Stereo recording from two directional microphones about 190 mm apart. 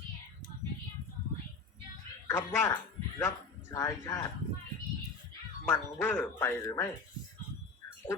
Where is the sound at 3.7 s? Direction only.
15° left (ahead or behind).